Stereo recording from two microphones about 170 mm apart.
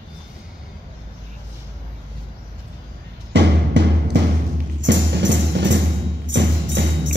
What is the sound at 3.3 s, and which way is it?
Music, 90° right.